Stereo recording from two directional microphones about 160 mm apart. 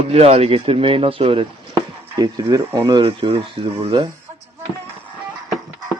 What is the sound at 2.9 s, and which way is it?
Speech, 35° right (ahead or behind).